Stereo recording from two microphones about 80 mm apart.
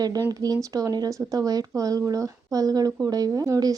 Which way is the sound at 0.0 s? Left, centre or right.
Right.